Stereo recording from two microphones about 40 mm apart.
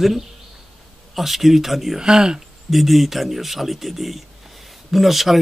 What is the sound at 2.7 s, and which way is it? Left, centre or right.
Speech, centre.